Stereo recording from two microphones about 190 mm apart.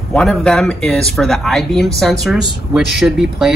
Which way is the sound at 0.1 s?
5° left (ahead or behind).